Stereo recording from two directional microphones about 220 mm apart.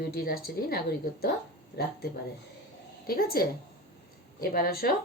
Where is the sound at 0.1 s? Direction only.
45° left (ahead or behind).